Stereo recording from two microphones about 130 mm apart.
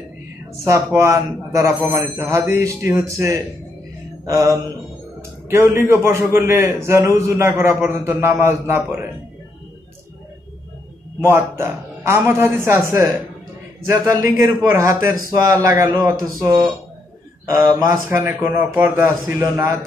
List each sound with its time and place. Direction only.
0.9 s a man's voice: 25° right (ahead or behind)
4.3 s a man's voice: 25° right (ahead or behind)
5.8 s a man's voice: 20° right (ahead or behind)
11.2 s a man's voice: 20° right (ahead or behind)